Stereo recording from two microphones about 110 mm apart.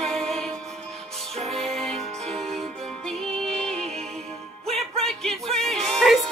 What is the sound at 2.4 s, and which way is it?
Music, 5° left (ahead or behind).